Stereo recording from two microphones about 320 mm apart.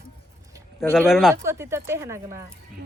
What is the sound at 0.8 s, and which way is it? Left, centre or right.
Speech, centre.